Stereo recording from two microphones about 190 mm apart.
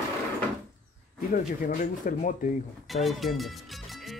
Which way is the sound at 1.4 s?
45° left (ahead or behind).